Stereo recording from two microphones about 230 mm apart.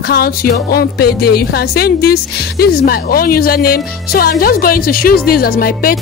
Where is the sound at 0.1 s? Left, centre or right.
Left.